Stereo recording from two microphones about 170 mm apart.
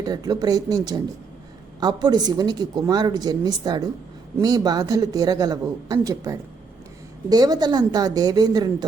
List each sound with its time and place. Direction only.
0.0 s a woman's voice: 20° right (ahead or behind)